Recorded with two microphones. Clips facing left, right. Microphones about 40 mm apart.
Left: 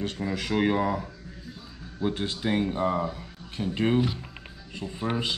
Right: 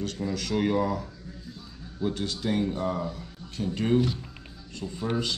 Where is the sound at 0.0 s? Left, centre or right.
Left.